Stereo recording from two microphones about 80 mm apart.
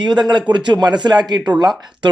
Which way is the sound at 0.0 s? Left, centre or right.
Right.